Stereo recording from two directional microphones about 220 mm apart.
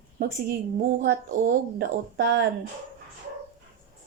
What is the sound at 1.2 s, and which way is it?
Speech, 40° right (ahead or behind).